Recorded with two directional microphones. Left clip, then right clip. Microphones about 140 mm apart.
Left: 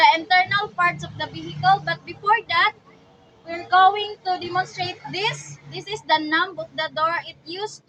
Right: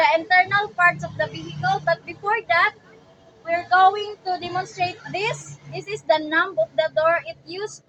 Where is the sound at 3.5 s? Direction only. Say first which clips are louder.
Even; 10° left (ahead or behind).